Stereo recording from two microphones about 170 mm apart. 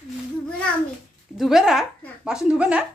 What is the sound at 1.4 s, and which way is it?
Speech, centre (ahead or behind).